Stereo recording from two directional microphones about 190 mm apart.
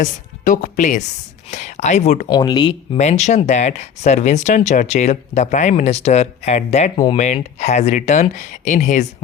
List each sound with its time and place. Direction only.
0.0 s speech: 40° left (ahead or behind)
2.3 s speech: 20° left (ahead or behind)
3.0 s speech: 35° left (ahead or behind)